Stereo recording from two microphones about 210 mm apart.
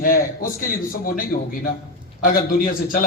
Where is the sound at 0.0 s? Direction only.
40° left (ahead or behind).